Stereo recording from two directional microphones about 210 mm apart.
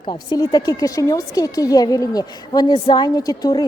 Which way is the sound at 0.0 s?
20° left (ahead or behind).